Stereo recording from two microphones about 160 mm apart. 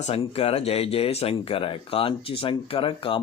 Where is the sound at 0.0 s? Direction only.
40° left (ahead or behind).